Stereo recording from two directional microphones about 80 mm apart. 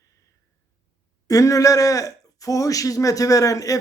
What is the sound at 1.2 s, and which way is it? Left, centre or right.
Speech, left.